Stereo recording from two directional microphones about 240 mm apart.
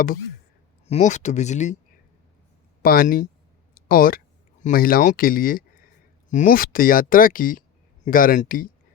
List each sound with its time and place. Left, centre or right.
0.9 s speech: left
2.8 s speech: left